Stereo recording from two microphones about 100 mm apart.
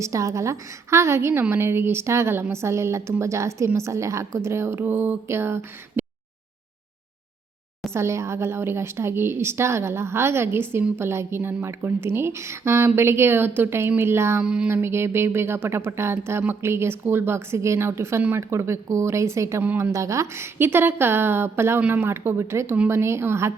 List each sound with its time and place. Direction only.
0.0 s a woman's voice: 30° right (ahead or behind)
7.9 s a woman's voice: 30° right (ahead or behind)
14.4 s a sound: 10° right (ahead or behind)
14.7 s a woman's voice: 25° right (ahead or behind)